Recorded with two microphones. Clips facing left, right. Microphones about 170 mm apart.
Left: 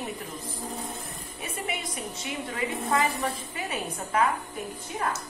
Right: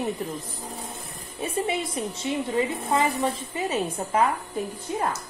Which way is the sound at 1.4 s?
30° right (ahead or behind).